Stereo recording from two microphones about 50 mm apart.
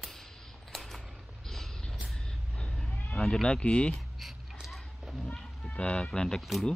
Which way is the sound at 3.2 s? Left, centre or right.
Centre.